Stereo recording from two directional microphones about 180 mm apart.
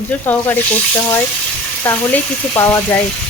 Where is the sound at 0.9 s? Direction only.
15° left (ahead or behind).